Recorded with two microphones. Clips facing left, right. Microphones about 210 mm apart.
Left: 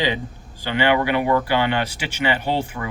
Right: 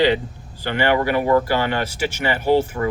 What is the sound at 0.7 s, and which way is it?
Speech, 40° right (ahead or behind).